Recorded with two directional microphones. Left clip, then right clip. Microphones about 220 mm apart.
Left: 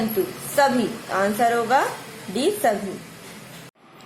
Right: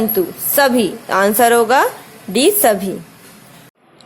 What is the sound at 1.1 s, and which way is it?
A woman's voice, 40° right (ahead or behind).